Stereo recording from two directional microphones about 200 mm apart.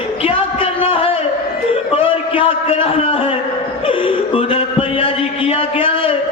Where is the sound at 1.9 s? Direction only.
30° left (ahead or behind).